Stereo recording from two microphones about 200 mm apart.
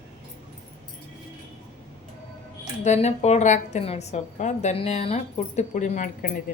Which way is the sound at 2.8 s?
35° left (ahead or behind).